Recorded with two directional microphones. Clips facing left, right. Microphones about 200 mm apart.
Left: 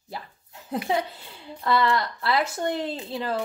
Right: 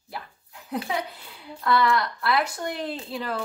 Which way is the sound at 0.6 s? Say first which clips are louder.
Left 3 dB; 25° left (ahead or behind).